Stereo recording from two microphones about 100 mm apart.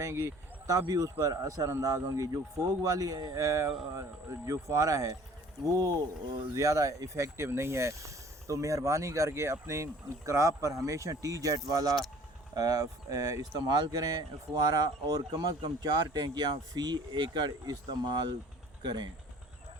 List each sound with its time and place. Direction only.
0.0 s speech: 30° right (ahead or behind); by 19.1 s 45° right (ahead or behind)